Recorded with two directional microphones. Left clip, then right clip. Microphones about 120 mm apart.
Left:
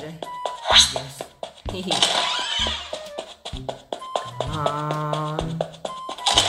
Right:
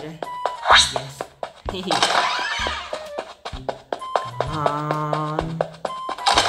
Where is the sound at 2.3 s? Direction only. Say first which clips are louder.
Even; 15° left (ahead or behind).